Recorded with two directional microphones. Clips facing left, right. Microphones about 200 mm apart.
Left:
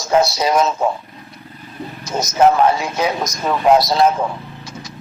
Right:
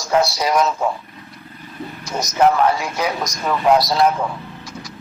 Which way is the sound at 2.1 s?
25° left (ahead or behind).